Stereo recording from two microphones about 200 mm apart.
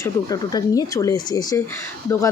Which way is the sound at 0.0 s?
15° left (ahead or behind).